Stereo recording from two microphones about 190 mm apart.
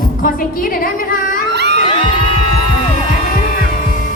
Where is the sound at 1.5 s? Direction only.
65° right (ahead or behind).